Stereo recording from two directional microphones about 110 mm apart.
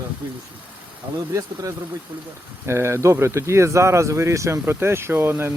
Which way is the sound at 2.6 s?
25° right (ahead or behind).